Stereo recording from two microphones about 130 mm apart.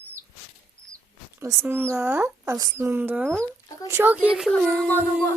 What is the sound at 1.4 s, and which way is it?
Speech, 20° right (ahead or behind).